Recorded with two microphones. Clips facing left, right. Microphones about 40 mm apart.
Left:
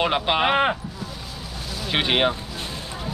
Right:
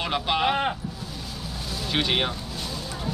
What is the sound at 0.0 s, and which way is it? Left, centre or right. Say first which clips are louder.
Speech: left 4 dB; left.